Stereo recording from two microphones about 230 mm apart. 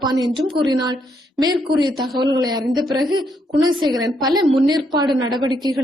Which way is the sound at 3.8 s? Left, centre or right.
Centre.